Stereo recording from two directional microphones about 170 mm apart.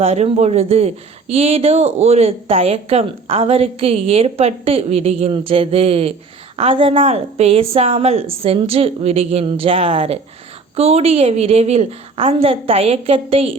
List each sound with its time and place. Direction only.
0.0 s speech: 40° right (ahead or behind)